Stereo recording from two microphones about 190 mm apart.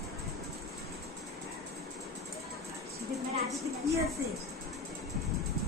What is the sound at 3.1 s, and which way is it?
Music, centre (ahead or behind).